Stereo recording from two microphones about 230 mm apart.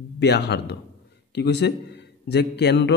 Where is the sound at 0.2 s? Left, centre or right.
Left.